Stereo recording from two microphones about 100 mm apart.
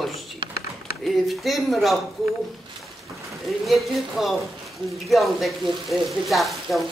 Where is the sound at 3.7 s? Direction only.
Centre (ahead or behind).